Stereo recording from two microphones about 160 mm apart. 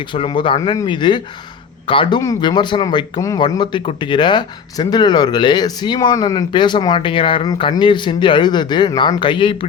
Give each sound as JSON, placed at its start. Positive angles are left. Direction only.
{"t": 0.0, "sound": "speech", "side_deg": 30}